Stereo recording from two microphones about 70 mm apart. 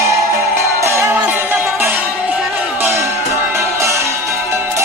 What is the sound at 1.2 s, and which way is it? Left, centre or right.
Music, right.